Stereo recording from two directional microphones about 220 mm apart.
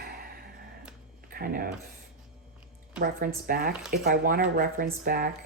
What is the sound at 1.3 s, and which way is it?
Speech, 40° right (ahead or behind).